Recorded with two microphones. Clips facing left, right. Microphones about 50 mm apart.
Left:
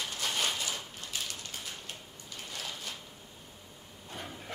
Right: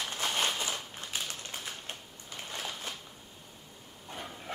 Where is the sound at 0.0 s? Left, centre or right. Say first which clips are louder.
Right 2 dB; right.